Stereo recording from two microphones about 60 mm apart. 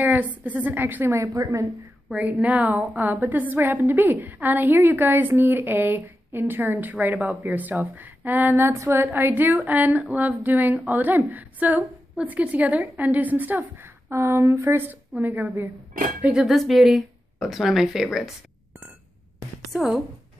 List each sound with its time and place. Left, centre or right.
0.0 s a woman's voice: right
1.1 s a woman's voice: right
2.4 s a woman's voice: right
14.1 s speech: right
14.8 s a woman's voice: right
16.3 s speech: centre
19.7 s speech: centre